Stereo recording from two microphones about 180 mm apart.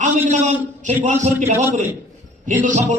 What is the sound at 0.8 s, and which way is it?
A man's voice, 40° right (ahead or behind).